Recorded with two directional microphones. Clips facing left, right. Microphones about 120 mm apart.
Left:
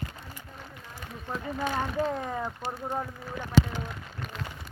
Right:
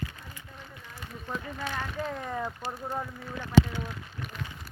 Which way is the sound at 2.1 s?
15° left (ahead or behind).